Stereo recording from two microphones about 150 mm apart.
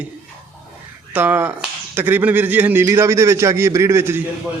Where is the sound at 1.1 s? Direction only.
10° right (ahead or behind).